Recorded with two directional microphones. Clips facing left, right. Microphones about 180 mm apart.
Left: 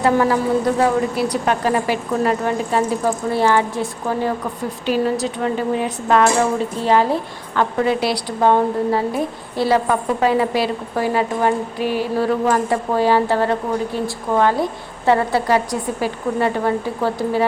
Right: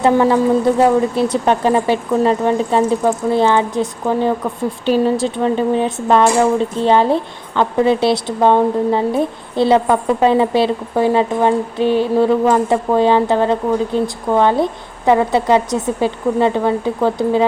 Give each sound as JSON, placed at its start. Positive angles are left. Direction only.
{"t": 0.0, "sound": "a woman's voice", "side_deg": -25}